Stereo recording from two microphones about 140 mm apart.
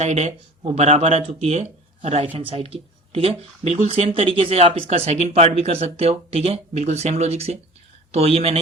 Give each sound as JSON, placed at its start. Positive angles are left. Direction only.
{"t": 0.0, "sound": "speech", "side_deg": -55}